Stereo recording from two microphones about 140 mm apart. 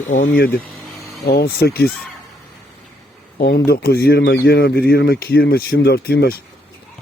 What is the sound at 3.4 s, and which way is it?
Speech, 90° left.